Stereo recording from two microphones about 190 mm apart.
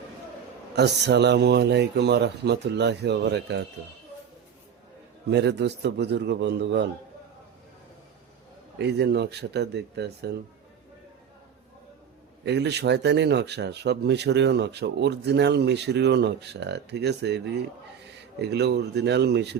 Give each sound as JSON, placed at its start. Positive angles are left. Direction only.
{"t": 0.8, "sound": "speech", "side_deg": -65}
{"t": 5.3, "sound": "speech", "side_deg": -65}
{"t": 8.8, "sound": "speech", "side_deg": -60}
{"t": 12.5, "sound": "speech", "side_deg": -60}